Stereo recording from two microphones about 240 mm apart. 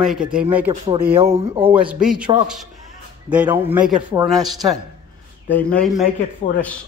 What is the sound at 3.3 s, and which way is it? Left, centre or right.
A man's voice, centre.